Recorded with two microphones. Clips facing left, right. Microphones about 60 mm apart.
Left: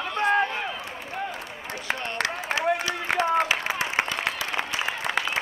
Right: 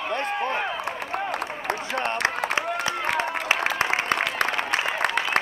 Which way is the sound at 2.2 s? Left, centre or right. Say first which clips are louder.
Even; right.